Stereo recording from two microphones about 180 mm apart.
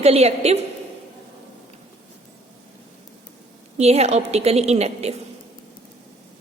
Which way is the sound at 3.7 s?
35° right (ahead or behind).